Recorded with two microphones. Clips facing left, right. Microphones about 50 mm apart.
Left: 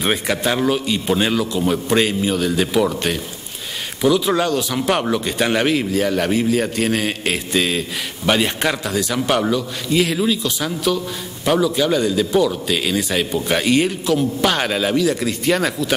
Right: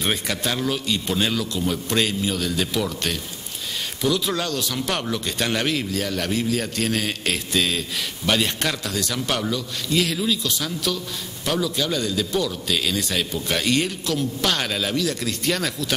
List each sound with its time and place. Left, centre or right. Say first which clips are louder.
0.0 s a man's voice: left 5 dB; centre